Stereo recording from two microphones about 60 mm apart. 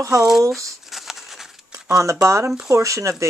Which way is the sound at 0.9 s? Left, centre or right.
Centre.